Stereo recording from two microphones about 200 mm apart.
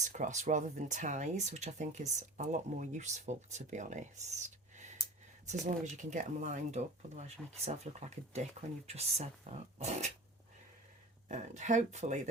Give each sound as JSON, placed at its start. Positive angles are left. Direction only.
{"t": 0.0, "sound": "speech", "side_deg": -35}
{"t": 5.6, "sound": "speech", "side_deg": -35}
{"t": 11.3, "sound": "speech", "side_deg": -35}